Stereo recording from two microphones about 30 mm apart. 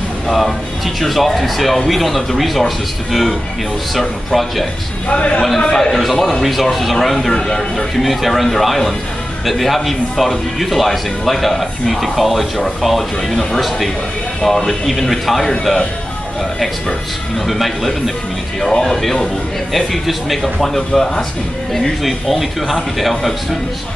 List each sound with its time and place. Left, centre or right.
1.0 s speech: centre
5.0 s a man's voice: left
5.7 s speech: centre
5.9 s speech: centre
14.4 s speech: centre
14.9 s speech: centre
17.5 s speech: centre
20.6 s speech: centre
22.0 s speech: centre